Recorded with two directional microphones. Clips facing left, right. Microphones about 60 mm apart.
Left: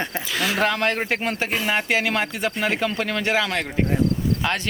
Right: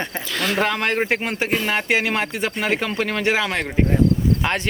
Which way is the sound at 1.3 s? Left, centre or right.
Right.